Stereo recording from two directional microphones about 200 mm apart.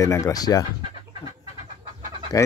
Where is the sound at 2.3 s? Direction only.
15° left (ahead or behind).